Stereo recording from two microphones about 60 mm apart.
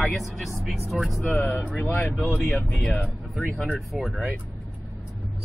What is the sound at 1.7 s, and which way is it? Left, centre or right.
Speech, left.